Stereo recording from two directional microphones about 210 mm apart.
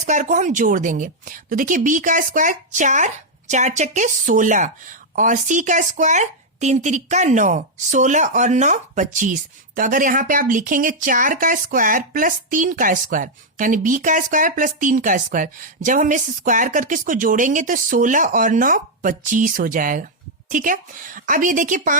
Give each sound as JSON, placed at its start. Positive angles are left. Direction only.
{"t": 0.0, "sound": "speech", "side_deg": -35}